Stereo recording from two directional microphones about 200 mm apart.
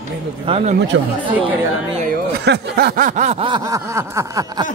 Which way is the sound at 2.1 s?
55° right (ahead or behind).